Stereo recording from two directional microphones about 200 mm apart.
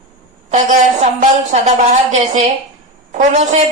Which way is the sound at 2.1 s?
35° right (ahead or behind).